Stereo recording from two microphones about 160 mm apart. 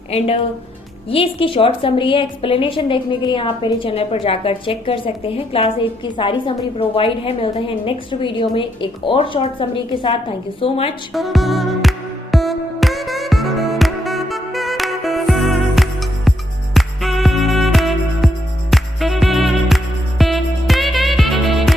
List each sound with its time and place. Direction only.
0.1 s a woman's voice: 40° left (ahead or behind)
11.1 s music: centre (ahead or behind)